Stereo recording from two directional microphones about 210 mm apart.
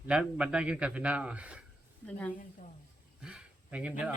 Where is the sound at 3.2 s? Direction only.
5° right (ahead or behind).